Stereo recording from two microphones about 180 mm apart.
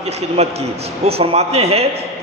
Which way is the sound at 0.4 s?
35° right (ahead or behind).